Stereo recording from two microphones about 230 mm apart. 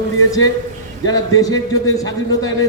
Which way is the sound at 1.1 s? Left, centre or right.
Centre.